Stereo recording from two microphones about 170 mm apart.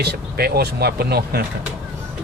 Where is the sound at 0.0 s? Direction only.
70° right (ahead or behind).